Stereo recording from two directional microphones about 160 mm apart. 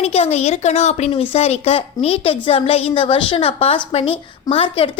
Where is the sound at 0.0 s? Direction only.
40° left (ahead or behind).